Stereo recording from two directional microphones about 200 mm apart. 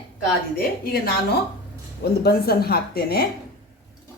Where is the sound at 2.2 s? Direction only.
50° left (ahead or behind).